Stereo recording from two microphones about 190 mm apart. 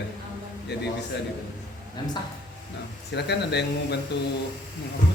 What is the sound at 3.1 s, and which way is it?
Speech, 60° left (ahead or behind).